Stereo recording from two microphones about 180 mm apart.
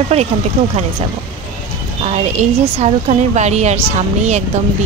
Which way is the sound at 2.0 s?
35° right (ahead or behind).